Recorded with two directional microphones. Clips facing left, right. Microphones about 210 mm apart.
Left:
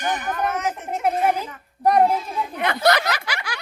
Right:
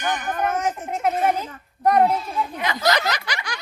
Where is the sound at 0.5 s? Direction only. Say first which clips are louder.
Right 2 dB; 50° right (ahead or behind).